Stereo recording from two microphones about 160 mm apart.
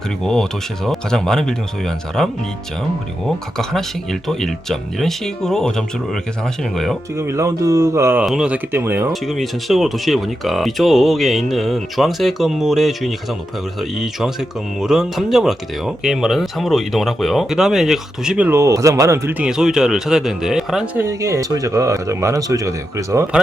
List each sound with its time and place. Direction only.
0.2 s speech: centre (ahead or behind)
3.6 s speech: centre (ahead or behind)
7.2 s speech: 15° right (ahead or behind)
8.2 s speech: 5° right (ahead or behind)
9.2 s speech: centre (ahead or behind)
21.0 s speech: 20° right (ahead or behind)